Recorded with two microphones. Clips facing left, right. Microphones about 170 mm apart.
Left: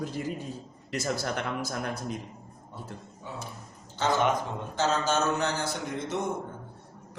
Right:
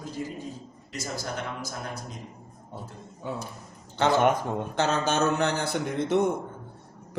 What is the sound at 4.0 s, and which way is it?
A man's voice, 65° right (ahead or behind).